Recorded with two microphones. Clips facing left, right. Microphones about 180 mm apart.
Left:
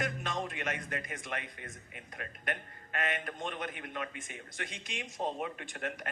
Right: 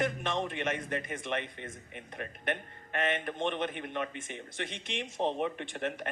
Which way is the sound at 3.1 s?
25° right (ahead or behind).